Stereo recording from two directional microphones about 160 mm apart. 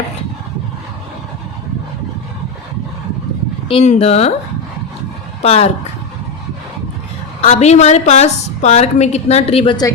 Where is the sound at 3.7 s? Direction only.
35° left (ahead or behind).